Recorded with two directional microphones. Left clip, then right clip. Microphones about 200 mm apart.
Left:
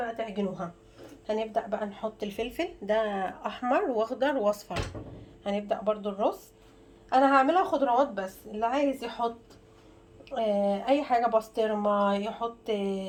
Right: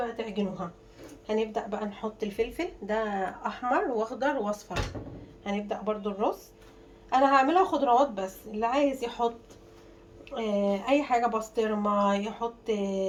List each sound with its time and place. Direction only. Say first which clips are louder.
1.3 s speech: even; 30° left (ahead or behind)